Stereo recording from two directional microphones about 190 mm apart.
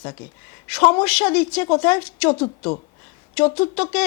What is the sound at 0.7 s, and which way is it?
Speech, 5° left (ahead or behind).